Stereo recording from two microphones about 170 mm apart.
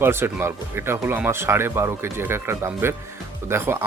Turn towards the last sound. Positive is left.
turn(degrees=-15)  # may be behind; listen again after turning